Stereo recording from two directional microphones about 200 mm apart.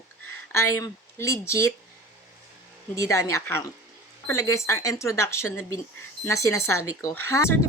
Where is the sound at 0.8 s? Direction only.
15° left (ahead or behind).